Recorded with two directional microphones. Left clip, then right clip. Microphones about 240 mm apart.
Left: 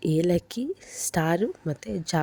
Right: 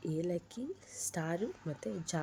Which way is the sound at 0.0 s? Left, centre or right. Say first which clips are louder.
Left 13 dB; left.